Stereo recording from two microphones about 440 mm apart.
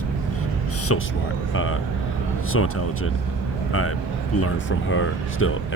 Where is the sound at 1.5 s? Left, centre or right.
Left.